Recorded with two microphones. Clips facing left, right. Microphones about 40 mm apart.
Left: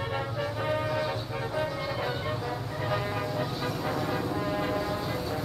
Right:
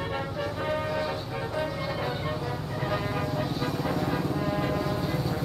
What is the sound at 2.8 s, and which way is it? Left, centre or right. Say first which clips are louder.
Vehicle: right 1 dB; centre.